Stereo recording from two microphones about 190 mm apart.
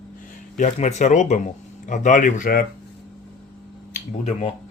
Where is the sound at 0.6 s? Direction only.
40° left (ahead or behind).